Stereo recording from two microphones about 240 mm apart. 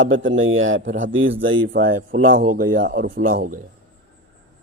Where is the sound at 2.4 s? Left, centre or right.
Right.